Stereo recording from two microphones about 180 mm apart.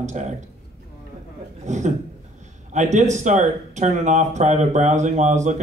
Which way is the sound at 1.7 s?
40° right (ahead or behind).